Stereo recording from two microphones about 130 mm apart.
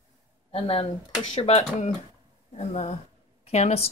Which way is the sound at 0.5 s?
50° left (ahead or behind).